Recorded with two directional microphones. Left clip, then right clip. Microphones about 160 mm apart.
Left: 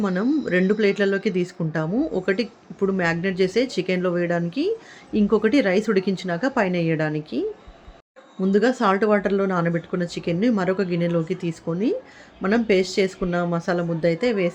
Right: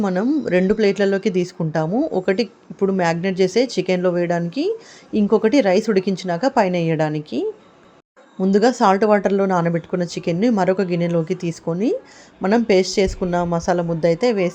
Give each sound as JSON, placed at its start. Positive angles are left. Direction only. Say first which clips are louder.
{"t": 0.0, "sound": "speech", "louder": "right 3 dB", "side_deg": -20}